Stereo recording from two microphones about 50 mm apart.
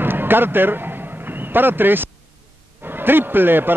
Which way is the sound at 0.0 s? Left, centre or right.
Right.